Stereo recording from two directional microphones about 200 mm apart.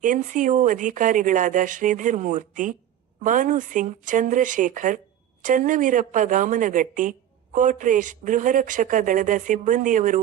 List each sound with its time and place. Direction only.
0.0 s a woman's voice: 40° right (ahead or behind)